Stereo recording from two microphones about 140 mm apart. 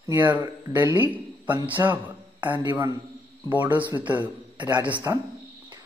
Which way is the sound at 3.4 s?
15° right (ahead or behind).